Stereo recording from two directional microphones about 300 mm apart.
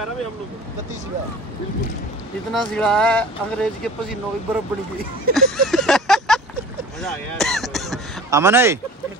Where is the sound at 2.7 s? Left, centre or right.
Centre.